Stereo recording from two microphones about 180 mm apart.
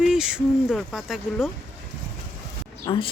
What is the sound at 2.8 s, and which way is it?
Speech, 25° left (ahead or behind).